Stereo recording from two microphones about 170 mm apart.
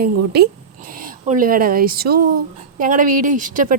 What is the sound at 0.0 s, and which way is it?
A woman's voice, 65° right (ahead or behind).